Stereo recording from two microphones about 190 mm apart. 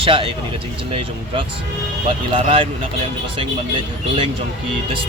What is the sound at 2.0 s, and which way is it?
Speech, 30° right (ahead or behind).